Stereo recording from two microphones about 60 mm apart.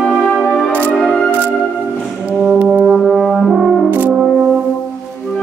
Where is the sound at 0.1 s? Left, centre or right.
Centre.